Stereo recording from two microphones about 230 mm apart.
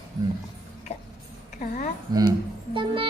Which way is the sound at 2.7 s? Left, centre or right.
Right.